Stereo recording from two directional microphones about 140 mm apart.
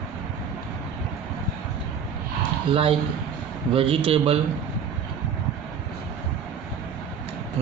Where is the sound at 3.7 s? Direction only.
45° right (ahead or behind).